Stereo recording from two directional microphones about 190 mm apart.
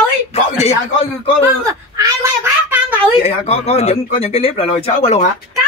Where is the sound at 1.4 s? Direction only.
15° right (ahead or behind).